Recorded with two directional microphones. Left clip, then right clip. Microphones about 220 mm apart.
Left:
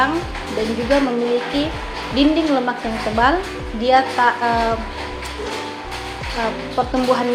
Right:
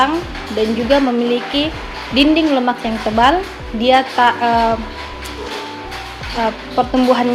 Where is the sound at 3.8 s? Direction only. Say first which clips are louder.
Right 3 dB; 35° right (ahead or behind).